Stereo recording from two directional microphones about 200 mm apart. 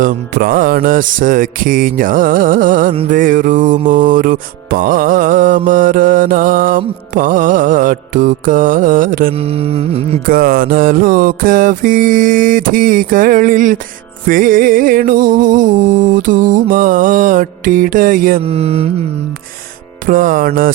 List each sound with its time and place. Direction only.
0.0 s music: 45° right (ahead or behind)
9.3 s music: 30° right (ahead or behind)
10.2 s music: 45° right (ahead or behind)
18.4 s mantra: 30° right (ahead or behind)
20.1 s music: 40° right (ahead or behind)